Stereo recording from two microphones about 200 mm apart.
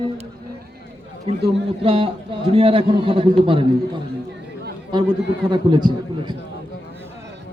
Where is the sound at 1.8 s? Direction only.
25° right (ahead or behind).